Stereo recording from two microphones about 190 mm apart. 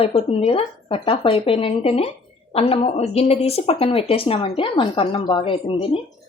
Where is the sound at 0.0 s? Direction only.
30° left (ahead or behind).